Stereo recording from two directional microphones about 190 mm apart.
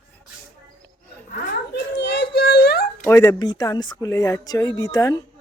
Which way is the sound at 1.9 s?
65° left (ahead or behind).